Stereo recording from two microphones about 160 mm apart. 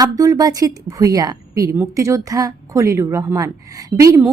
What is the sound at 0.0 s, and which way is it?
A woman's voice, 20° right (ahead or behind).